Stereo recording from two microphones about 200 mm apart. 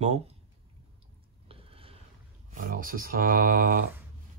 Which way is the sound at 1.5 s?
30° right (ahead or behind).